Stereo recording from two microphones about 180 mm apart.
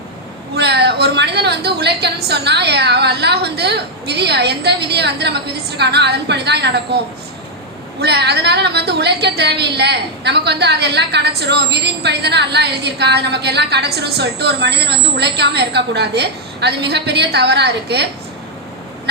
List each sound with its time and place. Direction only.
0.5 s a woman's voice: 65° right (ahead or behind)
8.0 s a woman's voice: 65° right (ahead or behind)